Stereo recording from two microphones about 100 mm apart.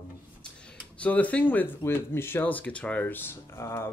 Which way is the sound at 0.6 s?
10° left (ahead or behind).